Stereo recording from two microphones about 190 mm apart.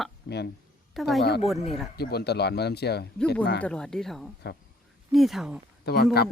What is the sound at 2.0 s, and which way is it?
Speech, 60° left (ahead or behind).